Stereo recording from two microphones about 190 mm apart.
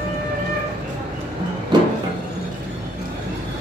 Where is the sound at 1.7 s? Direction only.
20° right (ahead or behind).